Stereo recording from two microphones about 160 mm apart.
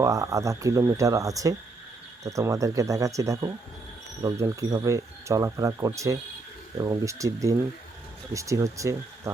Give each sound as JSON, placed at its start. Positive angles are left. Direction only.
{"t": 0.0, "sound": "speech", "side_deg": -20}